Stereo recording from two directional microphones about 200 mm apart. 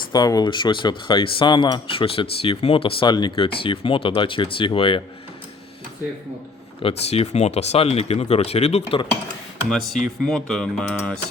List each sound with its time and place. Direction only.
0.1 s speech: 20° left (ahead or behind)
6.8 s speech: 30° left (ahead or behind)
9.6 s speech: centre (ahead or behind)